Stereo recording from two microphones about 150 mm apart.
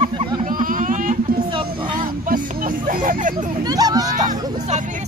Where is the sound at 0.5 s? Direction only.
65° right (ahead or behind).